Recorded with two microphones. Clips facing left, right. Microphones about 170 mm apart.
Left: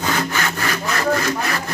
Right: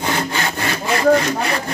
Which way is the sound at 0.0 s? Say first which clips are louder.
Right 1 dB; 25° right (ahead or behind).